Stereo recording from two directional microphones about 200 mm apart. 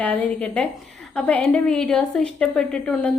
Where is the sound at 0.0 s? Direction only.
5° left (ahead or behind).